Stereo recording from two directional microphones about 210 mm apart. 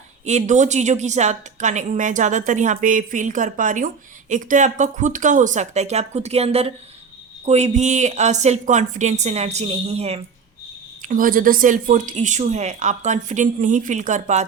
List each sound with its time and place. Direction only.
0.3 s a woman's voice: 35° right (ahead or behind)
11.0 s a woman's voice: 40° right (ahead or behind)